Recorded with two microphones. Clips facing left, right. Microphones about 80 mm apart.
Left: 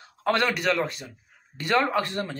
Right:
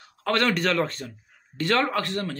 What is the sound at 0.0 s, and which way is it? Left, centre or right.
Speech, left.